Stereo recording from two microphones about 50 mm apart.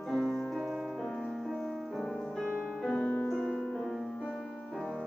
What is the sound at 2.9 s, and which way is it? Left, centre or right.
Music, left.